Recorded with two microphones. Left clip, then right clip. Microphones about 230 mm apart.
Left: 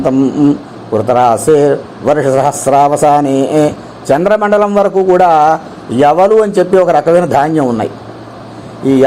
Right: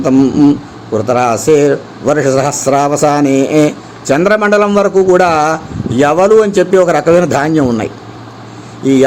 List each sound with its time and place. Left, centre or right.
0.0 s a man's voice: centre
2.0 s a man's voice: right
3.3 s a man's voice: centre